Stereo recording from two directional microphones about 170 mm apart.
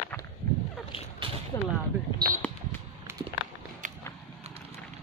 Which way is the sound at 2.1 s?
55° right (ahead or behind).